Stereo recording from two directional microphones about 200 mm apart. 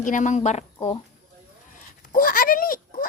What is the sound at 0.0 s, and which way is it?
Speech, 40° left (ahead or behind).